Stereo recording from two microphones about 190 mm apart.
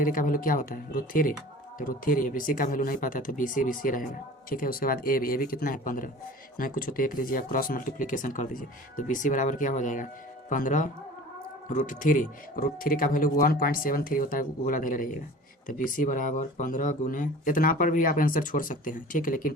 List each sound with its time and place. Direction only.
0.0 s speech: 45° left (ahead or behind)
11.9 s speech: 45° left (ahead or behind)